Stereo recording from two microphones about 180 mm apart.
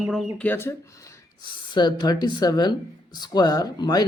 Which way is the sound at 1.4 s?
25° left (ahead or behind).